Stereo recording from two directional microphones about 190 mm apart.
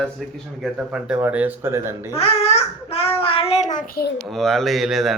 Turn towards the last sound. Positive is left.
turn(degrees=0)  # may be behind; listen again after turning